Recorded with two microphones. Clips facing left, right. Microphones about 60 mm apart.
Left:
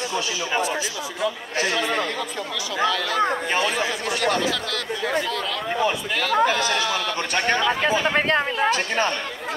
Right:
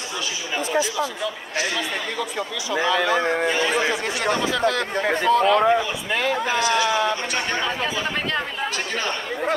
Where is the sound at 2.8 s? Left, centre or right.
Right.